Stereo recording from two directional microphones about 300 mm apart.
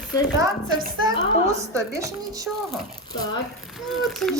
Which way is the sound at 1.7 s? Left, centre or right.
Centre.